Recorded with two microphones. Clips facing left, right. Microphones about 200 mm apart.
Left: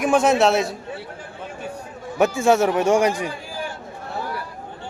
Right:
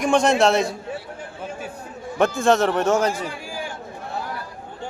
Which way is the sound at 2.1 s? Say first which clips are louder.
Left 1 dB; 10° left (ahead or behind).